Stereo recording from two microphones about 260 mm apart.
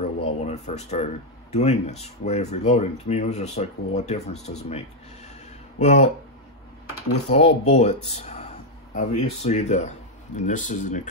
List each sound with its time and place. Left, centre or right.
0.0 s speech: left
7.2 s speech: left